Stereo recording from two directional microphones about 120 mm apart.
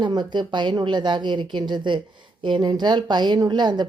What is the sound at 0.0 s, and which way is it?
A woman's voice, 40° right (ahead or behind).